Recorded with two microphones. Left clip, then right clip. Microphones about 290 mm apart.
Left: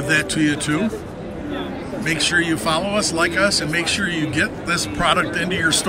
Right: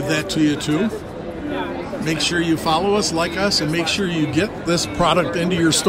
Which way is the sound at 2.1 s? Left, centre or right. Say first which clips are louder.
Left 2 dB; centre.